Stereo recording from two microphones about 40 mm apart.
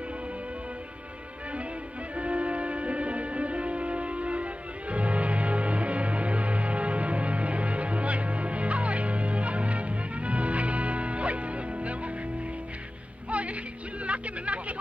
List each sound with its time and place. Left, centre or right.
2.1 s music: right
13.3 s music: right
14.0 s hubbub: right